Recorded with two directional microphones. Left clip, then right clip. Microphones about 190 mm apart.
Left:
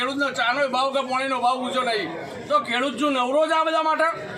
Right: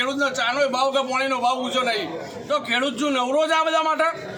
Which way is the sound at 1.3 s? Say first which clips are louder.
Left 1 dB; 10° right (ahead or behind).